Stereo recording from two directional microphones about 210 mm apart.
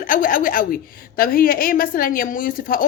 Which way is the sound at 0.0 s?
40° left (ahead or behind).